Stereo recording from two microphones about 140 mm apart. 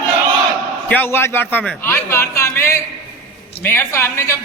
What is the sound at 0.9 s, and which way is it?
A man's voice, 15° left (ahead or behind).